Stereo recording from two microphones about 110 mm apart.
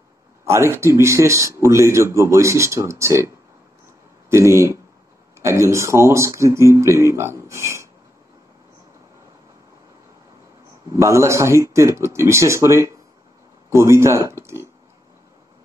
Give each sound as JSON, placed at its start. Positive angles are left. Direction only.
{"t": 0.5, "sound": "speech", "side_deg": -25}
{"t": 4.3, "sound": "speech", "side_deg": -25}
{"t": 10.9, "sound": "speech", "side_deg": -25}